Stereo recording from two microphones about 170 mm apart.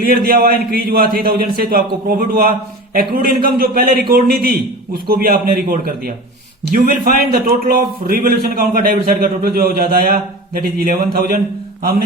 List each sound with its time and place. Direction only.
0.0 s a man's voice: 60° right (ahead or behind)